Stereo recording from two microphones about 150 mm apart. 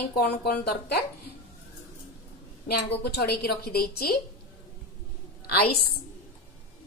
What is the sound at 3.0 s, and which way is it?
A woman's voice, 90° left.